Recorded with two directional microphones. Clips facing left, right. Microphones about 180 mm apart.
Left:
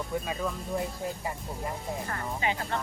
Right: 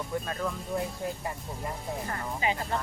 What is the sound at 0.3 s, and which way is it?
Speech, 5° left (ahead or behind).